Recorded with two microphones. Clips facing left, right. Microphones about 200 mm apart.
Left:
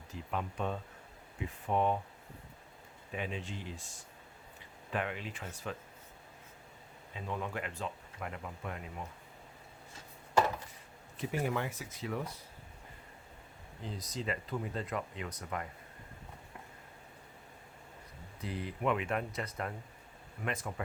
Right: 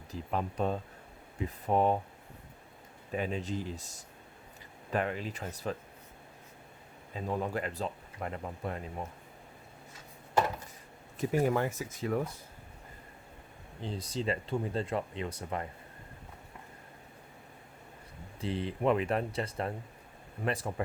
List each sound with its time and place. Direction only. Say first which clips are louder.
0.1 s speech: right 4 dB; 35° right (ahead or behind)
3.1 s speech: right 6 dB; 40° right (ahead or behind)
7.1 s speech: right 5 dB; 40° right (ahead or behind)
11.2 s speech: right 6 dB; 40° right (ahead or behind)
13.8 s speech: right 5 dB; 30° right (ahead or behind)
18.3 s speech: right 5 dB; 30° right (ahead or behind)